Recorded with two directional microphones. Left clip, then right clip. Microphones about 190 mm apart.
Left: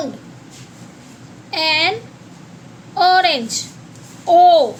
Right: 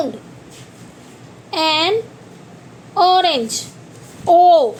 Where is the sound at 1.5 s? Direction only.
15° right (ahead or behind).